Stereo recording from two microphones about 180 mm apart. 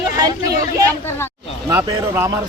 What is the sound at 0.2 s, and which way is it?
Speech, 20° right (ahead or behind).